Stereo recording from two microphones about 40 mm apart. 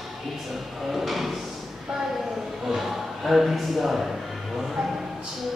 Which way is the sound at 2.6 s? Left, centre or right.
Centre.